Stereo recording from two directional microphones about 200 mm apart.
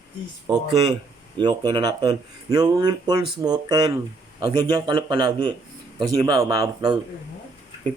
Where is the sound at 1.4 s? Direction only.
20° right (ahead or behind).